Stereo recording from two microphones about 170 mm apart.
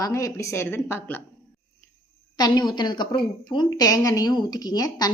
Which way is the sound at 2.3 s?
25° left (ahead or behind).